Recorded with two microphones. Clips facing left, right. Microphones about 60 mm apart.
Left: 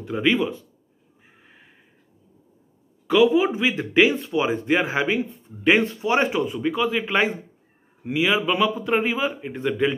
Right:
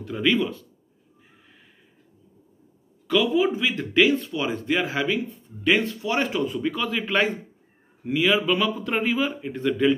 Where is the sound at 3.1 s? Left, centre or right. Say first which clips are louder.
Left 4 dB; centre.